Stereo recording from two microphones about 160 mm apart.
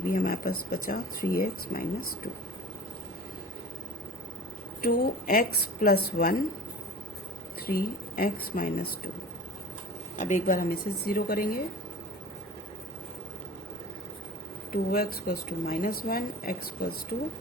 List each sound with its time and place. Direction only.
0.1 s speech: 70° left (ahead or behind)
4.8 s speech: 65° left (ahead or behind)
7.7 s speech: 70° left (ahead or behind)
10.2 s speech: 55° left (ahead or behind)
14.7 s speech: 70° left (ahead or behind)